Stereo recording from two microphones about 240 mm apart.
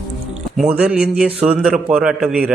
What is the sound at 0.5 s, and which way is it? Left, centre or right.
A man's voice, centre.